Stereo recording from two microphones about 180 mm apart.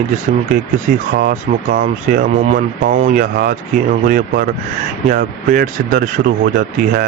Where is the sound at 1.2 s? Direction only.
55° right (ahead or behind).